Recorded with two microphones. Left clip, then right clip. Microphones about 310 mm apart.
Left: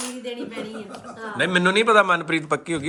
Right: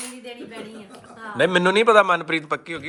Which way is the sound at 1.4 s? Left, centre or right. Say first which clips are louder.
Right 2 dB; centre.